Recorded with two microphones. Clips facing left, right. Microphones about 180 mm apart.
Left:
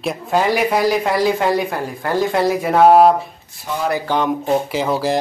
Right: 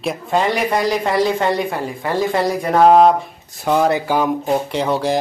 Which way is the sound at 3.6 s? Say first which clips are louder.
Right 7 dB; 60° right (ahead or behind).